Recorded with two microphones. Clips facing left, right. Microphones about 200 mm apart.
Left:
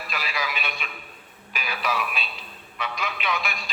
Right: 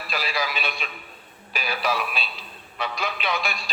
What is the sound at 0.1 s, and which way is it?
A man's voice, 35° right (ahead or behind).